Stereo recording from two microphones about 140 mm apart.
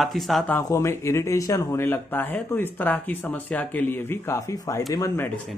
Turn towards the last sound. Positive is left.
turn(degrees=20)  # may be behind; listen again after turning